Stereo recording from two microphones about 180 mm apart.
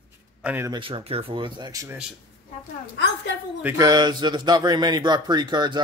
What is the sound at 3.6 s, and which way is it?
Speech, 15° right (ahead or behind).